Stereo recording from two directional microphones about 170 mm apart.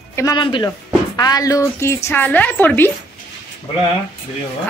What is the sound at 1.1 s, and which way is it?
A woman's voice, 20° left (ahead or behind).